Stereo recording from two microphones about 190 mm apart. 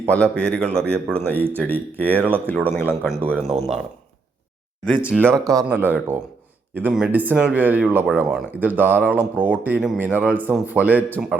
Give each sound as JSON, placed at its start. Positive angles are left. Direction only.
{"t": 0.1, "sound": "a man's voice", "side_deg": 5}
{"t": 3.4, "sound": "speech", "side_deg": -35}
{"t": 5.1, "sound": "speech", "side_deg": -15}